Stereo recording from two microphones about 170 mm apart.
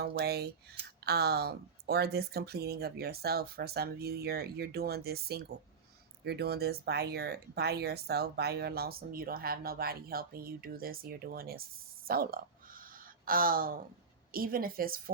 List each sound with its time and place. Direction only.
0.0 s speech: 70° right (ahead or behind)